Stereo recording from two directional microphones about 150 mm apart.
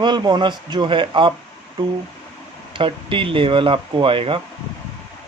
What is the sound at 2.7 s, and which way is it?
Speech, 35° right (ahead or behind).